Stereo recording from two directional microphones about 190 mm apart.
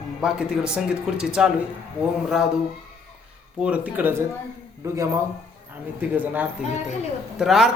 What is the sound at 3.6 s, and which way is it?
Speech, 5° right (ahead or behind).